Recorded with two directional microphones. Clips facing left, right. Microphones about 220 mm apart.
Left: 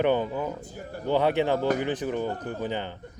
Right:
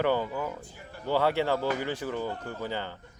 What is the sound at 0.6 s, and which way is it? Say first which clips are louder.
Speech: left 8 dB; 45° left (ahead or behind).